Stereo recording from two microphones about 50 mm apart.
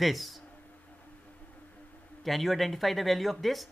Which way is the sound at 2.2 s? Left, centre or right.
Centre.